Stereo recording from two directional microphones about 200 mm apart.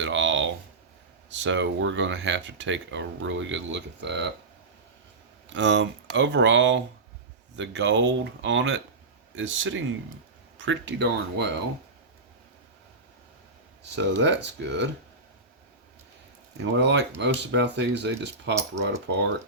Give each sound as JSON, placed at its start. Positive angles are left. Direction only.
{"t": 0.0, "sound": "a sound", "side_deg": -65}
{"t": 1.3, "sound": "speech", "side_deg": -65}
{"t": 5.5, "sound": "speech", "side_deg": -65}
{"t": 13.9, "sound": "speech", "side_deg": -60}
{"t": 16.7, "sound": "speech", "side_deg": -60}